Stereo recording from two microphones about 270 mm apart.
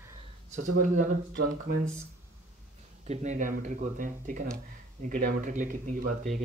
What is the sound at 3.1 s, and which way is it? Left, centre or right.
Speech, right.